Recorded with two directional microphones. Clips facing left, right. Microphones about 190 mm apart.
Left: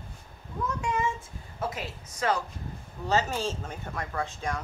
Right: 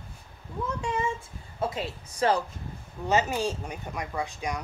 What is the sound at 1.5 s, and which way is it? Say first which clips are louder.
Speech: right 3 dB; 30° right (ahead or behind).